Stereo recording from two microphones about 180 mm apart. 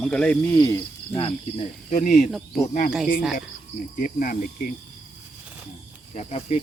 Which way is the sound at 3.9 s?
50° left (ahead or behind).